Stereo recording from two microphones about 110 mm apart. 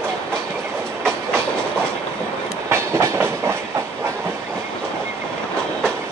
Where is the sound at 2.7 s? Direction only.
25° right (ahead or behind).